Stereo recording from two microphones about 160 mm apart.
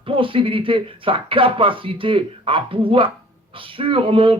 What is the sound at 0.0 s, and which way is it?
Speech, 35° right (ahead or behind).